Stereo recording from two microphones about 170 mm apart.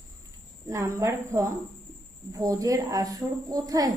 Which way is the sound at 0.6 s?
15° right (ahead or behind).